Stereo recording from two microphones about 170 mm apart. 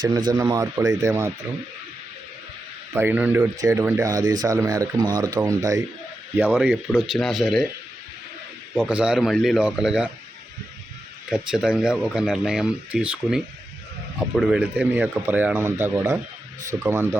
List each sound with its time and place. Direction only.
0.3 s speech: 20° right (ahead or behind)
2.9 s a man's voice: 10° right (ahead or behind)
8.7 s speech: 10° right (ahead or behind)
11.3 s a man's voice: 5° right (ahead or behind)